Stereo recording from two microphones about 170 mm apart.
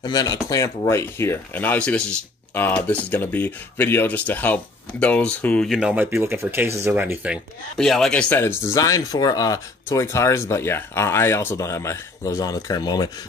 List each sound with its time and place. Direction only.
0.0 s speech: 25° left (ahead or behind); by 5.7 s 5° left (ahead or behind)
5.7 s speech: 5° right (ahead or behind)
7.7 s speech: centre (ahead or behind); by 13.1 s 25° left (ahead or behind)